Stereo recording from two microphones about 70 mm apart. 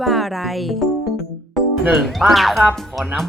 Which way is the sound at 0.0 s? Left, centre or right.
Centre.